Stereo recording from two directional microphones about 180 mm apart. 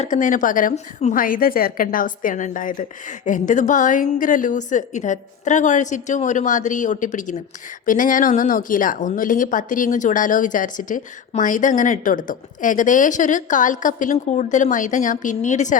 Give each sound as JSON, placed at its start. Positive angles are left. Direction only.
{"t": 0.0, "sound": "speech", "side_deg": 45}